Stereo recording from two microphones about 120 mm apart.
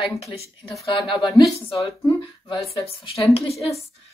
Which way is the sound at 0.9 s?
40° left (ahead or behind).